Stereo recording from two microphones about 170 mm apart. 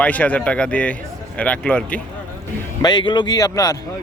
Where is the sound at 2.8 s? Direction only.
25° left (ahead or behind).